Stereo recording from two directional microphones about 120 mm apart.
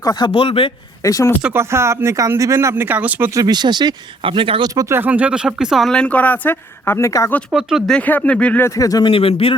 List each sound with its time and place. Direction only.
0.0 s a man's voice: 35° left (ahead or behind)
0.3 s speech: 50° left (ahead or behind)
1.0 s speech: 30° left (ahead or behind)
1.5 s speech: 20° right (ahead or behind)
3.4 s speech: 35° right (ahead or behind)
4.7 s speech: 30° right (ahead or behind)
4.9 s speech: 15° right (ahead or behind); by 7.3 s 25° left (ahead or behind)
7.5 s speech: 5° right (ahead or behind)
7.9 s speech: 15° left (ahead or behind)
8.6 s speech: 30° left (ahead or behind)
9.0 s speech: 50° left (ahead or behind)